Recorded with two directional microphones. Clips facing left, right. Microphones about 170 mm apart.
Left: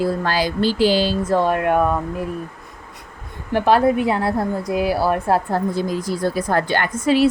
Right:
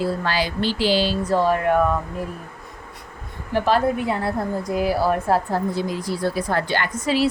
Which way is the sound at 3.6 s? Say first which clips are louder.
Left 5 dB; 65° left (ahead or behind).